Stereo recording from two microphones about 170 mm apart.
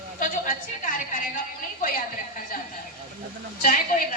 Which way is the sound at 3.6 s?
50° left (ahead or behind).